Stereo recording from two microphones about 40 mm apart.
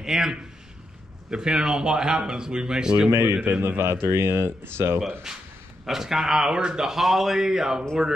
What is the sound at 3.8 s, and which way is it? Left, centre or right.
Speech, right.